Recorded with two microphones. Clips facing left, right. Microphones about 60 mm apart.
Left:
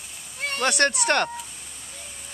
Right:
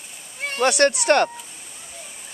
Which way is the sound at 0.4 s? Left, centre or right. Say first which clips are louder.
Right 4 dB; centre.